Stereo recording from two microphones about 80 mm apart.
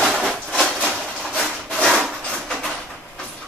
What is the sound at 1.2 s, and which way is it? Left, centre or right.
Wood, centre.